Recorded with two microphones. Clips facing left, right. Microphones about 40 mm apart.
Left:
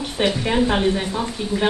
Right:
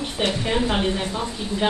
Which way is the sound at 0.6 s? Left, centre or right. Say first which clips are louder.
Left 3 dB; centre.